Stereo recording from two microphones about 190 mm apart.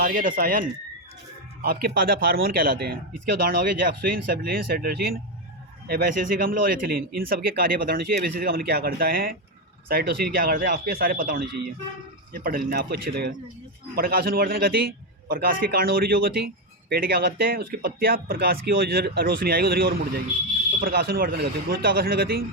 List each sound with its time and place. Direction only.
0.0 s speech: 45° right (ahead or behind)
1.6 s speech: 50° right (ahead or behind)